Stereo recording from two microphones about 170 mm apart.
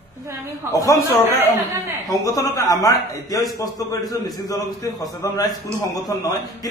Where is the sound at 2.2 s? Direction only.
20° left (ahead or behind).